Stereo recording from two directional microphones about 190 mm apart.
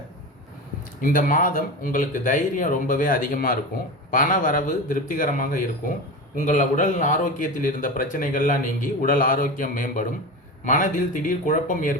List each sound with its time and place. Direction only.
1.0 s speech: 45° left (ahead or behind)